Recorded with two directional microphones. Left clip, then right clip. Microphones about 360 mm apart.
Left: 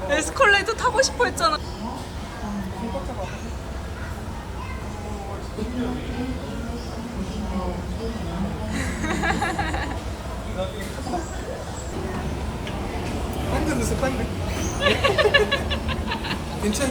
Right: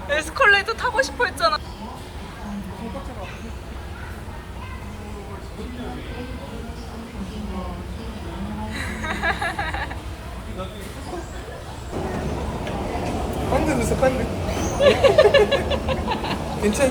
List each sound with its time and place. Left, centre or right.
0.1 s vehicle: centre
8.7 s music: centre
11.9 s a sound: centre